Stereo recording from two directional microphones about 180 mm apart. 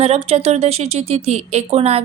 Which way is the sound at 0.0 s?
35° right (ahead or behind).